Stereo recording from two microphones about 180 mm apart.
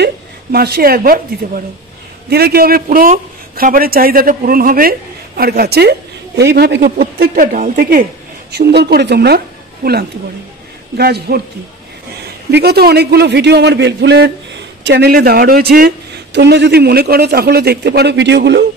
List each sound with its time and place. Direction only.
0.0 s a woman's voice: 60° right (ahead or behind)
8.5 s a woman's voice: 65° right (ahead or behind)
11.0 s a woman's voice: 60° right (ahead or behind)
12.4 s a man's voice: 65° right (ahead or behind)
16.3 s a man's voice: 70° right (ahead or behind)